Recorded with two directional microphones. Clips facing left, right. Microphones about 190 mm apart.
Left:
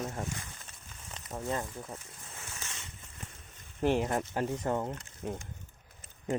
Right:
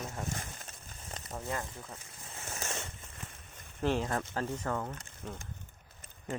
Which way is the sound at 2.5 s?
45° right (ahead or behind).